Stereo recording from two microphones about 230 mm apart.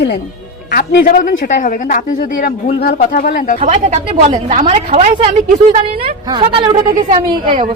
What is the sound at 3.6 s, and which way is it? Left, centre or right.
A woman's voice, right.